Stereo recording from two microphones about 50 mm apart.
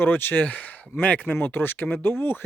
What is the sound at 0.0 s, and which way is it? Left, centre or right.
Speech, left.